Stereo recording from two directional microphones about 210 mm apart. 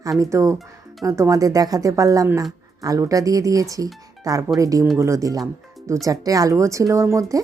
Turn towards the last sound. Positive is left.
turn(degrees=-15)  # may be behind; listen again after turning